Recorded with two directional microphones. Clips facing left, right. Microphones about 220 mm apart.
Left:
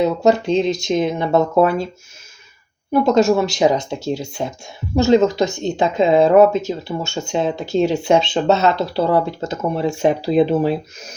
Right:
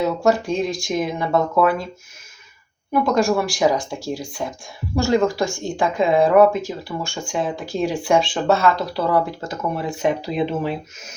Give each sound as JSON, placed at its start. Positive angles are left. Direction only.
{"t": 0.0, "sound": "a woman's voice", "side_deg": 20}
{"t": 2.9, "sound": "a woman's voice", "side_deg": 25}